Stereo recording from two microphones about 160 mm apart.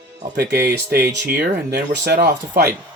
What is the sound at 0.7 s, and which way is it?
Speech, 80° right.